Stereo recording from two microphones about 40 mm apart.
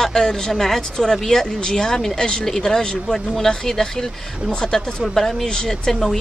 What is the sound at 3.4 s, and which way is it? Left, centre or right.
Speech, centre.